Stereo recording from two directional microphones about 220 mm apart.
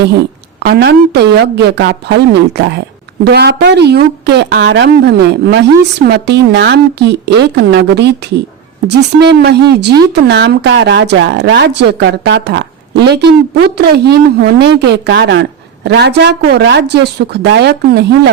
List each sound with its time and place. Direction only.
0.6 s a woman's voice: 50° right (ahead or behind)